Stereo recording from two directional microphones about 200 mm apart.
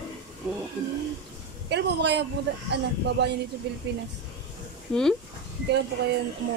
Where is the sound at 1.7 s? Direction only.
60° right (ahead or behind).